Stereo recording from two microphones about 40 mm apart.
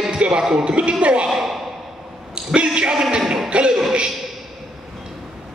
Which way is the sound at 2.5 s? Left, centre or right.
Right.